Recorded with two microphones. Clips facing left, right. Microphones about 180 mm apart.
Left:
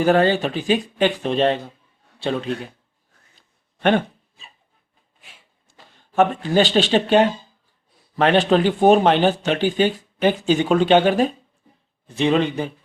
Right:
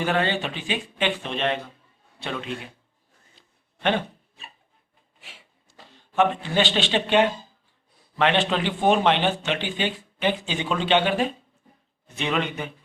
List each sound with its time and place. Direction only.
0.0 s a man's voice: 40° left (ahead or behind)
6.1 s speech: 40° left (ahead or behind)
12.0 s speech: 35° left (ahead or behind)